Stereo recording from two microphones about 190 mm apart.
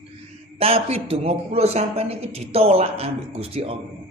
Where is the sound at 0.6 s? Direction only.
30° right (ahead or behind).